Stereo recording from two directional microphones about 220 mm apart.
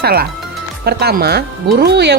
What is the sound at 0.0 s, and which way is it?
Speech, 45° right (ahead or behind).